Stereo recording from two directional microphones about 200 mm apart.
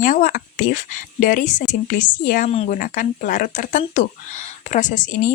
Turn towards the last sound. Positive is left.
turn(degrees=40)  # may be behind; listen again after turning